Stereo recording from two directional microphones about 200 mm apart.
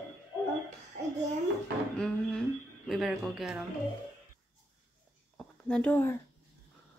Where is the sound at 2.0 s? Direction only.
5° left (ahead or behind).